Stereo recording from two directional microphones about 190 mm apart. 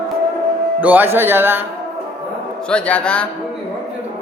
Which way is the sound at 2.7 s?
5° left (ahead or behind).